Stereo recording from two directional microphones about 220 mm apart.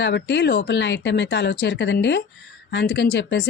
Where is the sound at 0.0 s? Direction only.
50° left (ahead or behind).